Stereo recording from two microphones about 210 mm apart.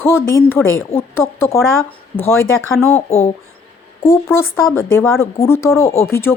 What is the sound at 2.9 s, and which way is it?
Speech, 30° left (ahead or behind).